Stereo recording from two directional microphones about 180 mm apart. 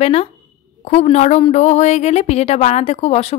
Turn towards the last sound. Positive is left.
turn(degrees=35)  # may be behind; listen again after turning